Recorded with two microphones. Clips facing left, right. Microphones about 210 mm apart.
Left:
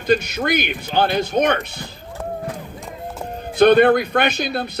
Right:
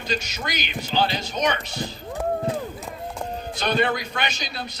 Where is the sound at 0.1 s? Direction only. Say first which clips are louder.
Left 11 dB; 55° left (ahead or behind).